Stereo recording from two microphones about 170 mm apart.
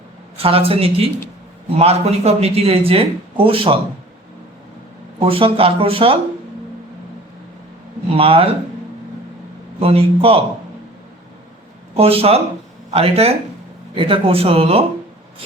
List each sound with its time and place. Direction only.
0.3 s speech: 35° right (ahead or behind)
5.2 s speech: 35° right (ahead or behind)
8.1 s a man's voice: 35° right (ahead or behind)
9.8 s speech: 35° right (ahead or behind)
11.9 s speech: 35° right (ahead or behind)